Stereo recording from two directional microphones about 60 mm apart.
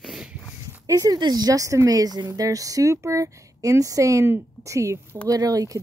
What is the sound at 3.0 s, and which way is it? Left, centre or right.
Speech, right.